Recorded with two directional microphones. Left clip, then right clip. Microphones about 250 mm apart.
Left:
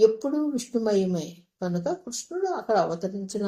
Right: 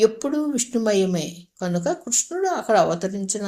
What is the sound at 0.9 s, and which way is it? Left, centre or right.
Speech, right.